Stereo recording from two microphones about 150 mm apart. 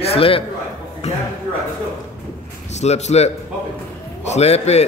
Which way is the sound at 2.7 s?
50° left (ahead or behind).